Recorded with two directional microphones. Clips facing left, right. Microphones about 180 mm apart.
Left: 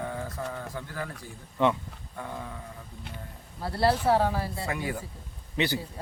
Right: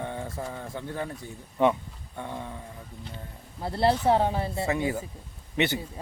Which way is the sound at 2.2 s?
25° right (ahead or behind).